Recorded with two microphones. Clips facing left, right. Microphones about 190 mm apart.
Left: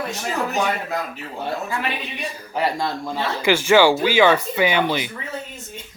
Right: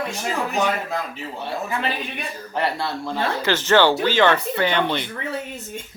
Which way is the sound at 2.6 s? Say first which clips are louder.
Left 2 dB; 15° left (ahead or behind).